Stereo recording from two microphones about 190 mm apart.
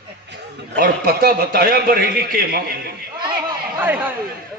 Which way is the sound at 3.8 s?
10° right (ahead or behind).